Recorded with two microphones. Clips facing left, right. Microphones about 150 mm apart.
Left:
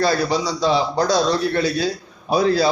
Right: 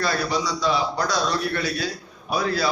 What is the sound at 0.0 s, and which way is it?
A man's voice, 30° left (ahead or behind).